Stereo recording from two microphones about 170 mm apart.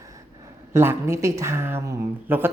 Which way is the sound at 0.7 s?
15° right (ahead or behind).